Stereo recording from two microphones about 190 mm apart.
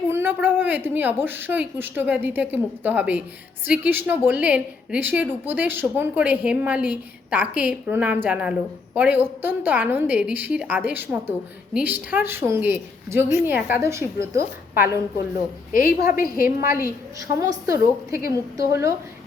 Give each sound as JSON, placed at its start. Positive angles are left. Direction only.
{"t": 0.1, "sound": "a woman's voice", "side_deg": -10}
{"t": 15.7, "sound": "a woman's voice", "side_deg": 45}
{"t": 17.3, "sound": "a woman's voice", "side_deg": -15}